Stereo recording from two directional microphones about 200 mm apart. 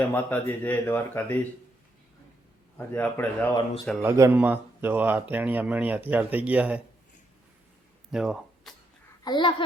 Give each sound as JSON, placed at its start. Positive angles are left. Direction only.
{"t": 0.1, "sound": "speech", "side_deg": 10}
{"t": 2.7, "sound": "speech", "side_deg": 10}
{"t": 4.0, "sound": "speech", "side_deg": -15}
{"t": 8.1, "sound": "speech", "side_deg": -5}
{"t": 9.2, "sound": "a child's voice", "side_deg": 25}